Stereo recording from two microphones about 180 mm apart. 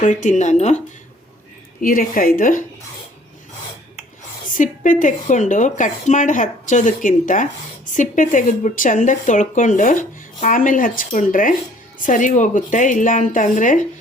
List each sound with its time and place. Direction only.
0.0 s speech: 45° left (ahead or behind)
1.8 s speech: 50° left (ahead or behind)
4.4 s speech: 45° left (ahead or behind)